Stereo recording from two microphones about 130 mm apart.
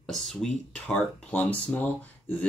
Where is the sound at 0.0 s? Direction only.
Centre (ahead or behind).